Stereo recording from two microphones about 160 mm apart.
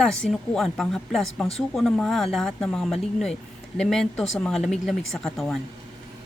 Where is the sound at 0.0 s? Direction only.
Centre (ahead or behind).